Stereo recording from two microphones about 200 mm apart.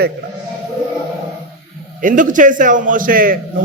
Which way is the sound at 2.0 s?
40° right (ahead or behind).